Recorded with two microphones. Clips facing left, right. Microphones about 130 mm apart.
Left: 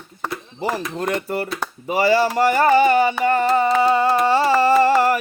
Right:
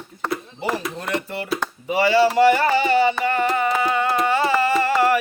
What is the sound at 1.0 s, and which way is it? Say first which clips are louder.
Music: left 3 dB; 45° left (ahead or behind).